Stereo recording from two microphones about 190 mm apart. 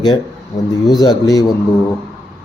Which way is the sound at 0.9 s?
20° left (ahead or behind).